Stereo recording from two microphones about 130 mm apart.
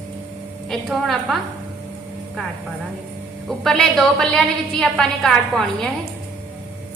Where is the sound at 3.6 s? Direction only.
5° left (ahead or behind).